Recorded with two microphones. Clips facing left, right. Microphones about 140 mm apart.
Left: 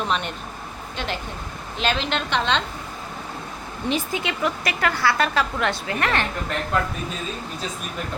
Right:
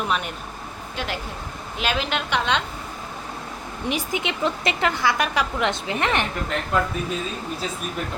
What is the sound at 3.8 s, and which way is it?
A woman's voice, 15° right (ahead or behind).